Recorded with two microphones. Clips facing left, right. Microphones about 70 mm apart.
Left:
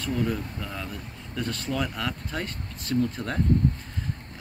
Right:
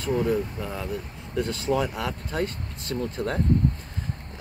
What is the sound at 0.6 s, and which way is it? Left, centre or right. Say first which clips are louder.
Speech: right 4 dB; centre.